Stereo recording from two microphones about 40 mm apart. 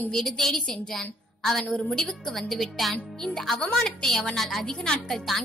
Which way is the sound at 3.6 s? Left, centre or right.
Centre.